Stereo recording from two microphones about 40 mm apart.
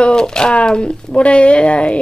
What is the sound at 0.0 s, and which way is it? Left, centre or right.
Speech, centre.